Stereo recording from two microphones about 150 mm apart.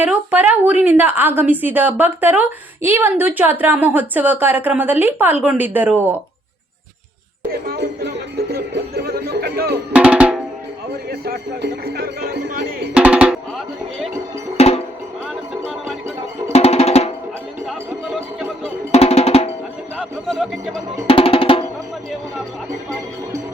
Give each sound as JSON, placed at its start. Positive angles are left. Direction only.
{"t": 0.0, "sound": "a woman's voice", "side_deg": -10}
{"t": 7.7, "sound": "speech", "side_deg": -90}
{"t": 9.9, "sound": "drum", "side_deg": -10}
{"t": 11.1, "sound": "speech", "side_deg": -90}
{"t": 12.9, "sound": "a woman's voice", "side_deg": -10}
{"t": 14.6, "sound": "music", "side_deg": 45}
{"t": 16.5, "sound": "drum", "side_deg": 45}
{"t": 18.9, "sound": "drum", "side_deg": 45}
{"t": 20.0, "sound": "speech", "side_deg": 0}
{"t": 21.1, "sound": "drum", "side_deg": 35}